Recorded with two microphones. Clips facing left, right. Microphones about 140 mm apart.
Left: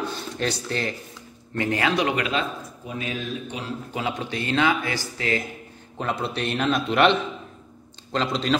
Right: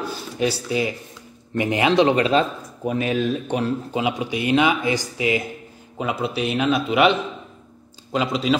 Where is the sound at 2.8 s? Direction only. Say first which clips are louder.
Right 10 dB; 60° right (ahead or behind).